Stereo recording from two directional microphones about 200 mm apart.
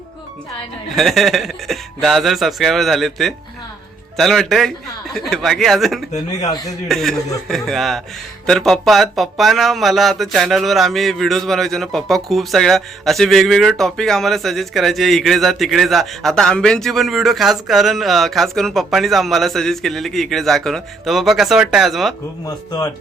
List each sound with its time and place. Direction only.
0.9 s speech: centre (ahead or behind)
6.4 s speech: 15° left (ahead or behind)
6.8 s speech: centre (ahead or behind)
22.4 s speech: 20° left (ahead or behind)